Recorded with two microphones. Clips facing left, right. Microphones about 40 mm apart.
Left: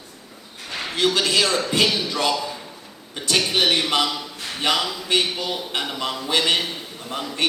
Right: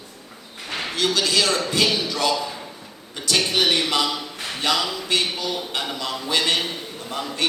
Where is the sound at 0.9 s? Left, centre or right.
Left.